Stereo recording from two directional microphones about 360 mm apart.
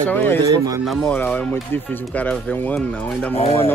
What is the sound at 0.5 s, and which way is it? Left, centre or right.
Speech, centre.